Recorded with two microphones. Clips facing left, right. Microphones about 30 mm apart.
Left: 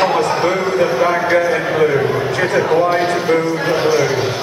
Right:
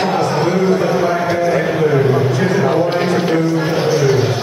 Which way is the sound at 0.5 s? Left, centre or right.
Left.